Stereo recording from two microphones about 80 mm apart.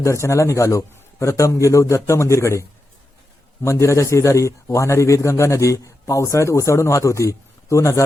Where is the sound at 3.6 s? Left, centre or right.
Left.